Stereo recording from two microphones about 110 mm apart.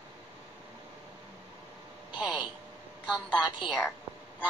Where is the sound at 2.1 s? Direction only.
10° right (ahead or behind).